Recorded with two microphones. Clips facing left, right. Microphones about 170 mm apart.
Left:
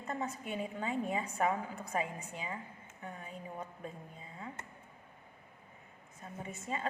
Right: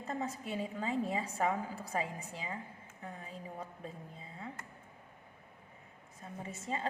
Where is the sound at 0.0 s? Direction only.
30° right (ahead or behind).